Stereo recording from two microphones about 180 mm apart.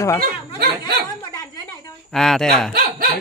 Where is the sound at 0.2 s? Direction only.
60° right (ahead or behind).